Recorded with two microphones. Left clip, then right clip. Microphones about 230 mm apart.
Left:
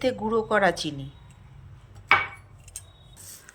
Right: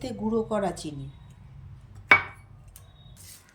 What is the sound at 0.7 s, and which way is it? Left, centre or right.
Speech, centre.